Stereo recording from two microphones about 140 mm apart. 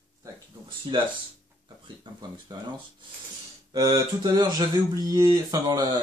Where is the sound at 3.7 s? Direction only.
30° right (ahead or behind).